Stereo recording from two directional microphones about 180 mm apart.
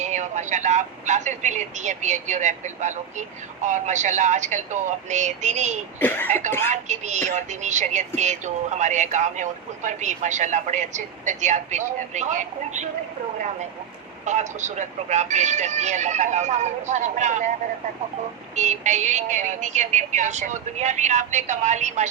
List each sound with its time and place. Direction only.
0.0 s speech: 40° right (ahead or behind)
6.0 s speech: 10° left (ahead or behind)
6.8 s speech: 40° right (ahead or behind)
14.3 s speech: 40° right (ahead or behind)
18.5 s speech: 40° right (ahead or behind)